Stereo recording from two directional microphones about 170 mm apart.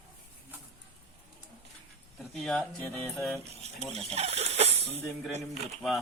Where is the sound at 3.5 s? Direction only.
40° right (ahead or behind).